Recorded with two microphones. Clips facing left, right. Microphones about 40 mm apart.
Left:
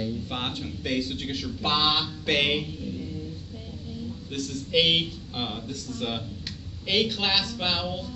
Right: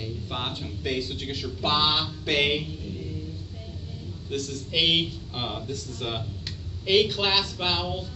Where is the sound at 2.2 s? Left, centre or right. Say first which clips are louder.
Even; centre.